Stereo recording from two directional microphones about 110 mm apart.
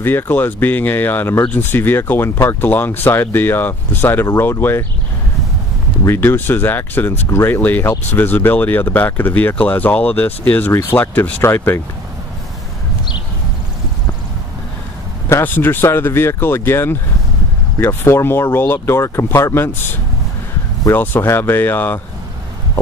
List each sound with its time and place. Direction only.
0.0 s speech: 20° left (ahead or behind)
6.0 s speech: 20° left (ahead or behind)
15.2 s speech: 20° left (ahead or behind)